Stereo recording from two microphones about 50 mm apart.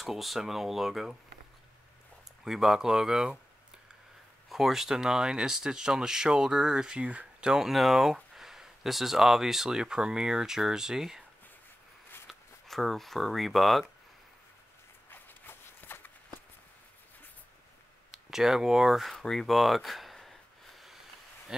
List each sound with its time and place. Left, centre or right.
0.0 s speech: centre
2.4 s speech: centre
4.5 s speech: centre
7.6 s speech: centre
12.3 s speech: centre
15.0 s walk: left
18.1 s speech: centre
19.1 s gasp: centre